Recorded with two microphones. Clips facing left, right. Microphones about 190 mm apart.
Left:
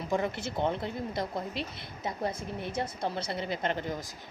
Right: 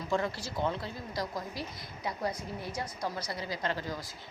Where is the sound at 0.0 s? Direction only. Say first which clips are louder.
Left 2 dB; 20° left (ahead or behind).